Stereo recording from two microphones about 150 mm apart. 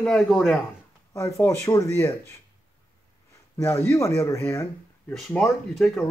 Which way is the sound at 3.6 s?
15° left (ahead or behind).